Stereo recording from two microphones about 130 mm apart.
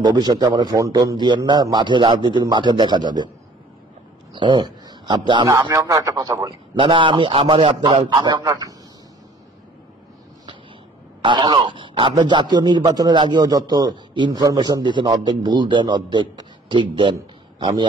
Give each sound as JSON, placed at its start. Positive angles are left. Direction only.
{"t": 0.0, "sound": "speech", "side_deg": -35}
{"t": 4.3, "sound": "speech", "side_deg": -35}
{"t": 5.5, "sound": "speech", "side_deg": -25}
{"t": 11.2, "sound": "a man's voice", "side_deg": -35}